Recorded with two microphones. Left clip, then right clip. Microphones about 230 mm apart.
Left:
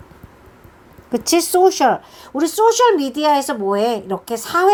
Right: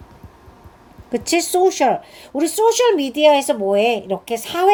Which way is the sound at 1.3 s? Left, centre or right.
Centre.